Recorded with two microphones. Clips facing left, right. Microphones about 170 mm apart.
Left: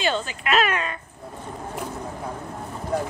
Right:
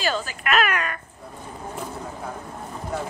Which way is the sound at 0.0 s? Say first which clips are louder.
Left 1 dB; 25° left (ahead or behind).